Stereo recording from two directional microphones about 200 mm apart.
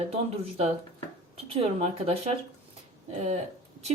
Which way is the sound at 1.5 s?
30° right (ahead or behind).